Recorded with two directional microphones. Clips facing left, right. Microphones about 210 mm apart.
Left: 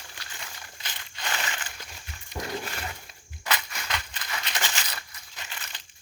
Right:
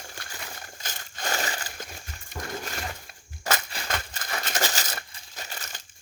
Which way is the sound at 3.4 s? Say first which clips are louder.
Right 3 dB; 45° right (ahead or behind).